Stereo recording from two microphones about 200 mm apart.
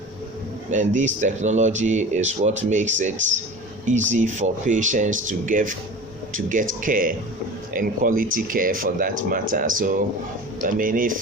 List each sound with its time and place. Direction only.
0.7 s speech: 40° right (ahead or behind)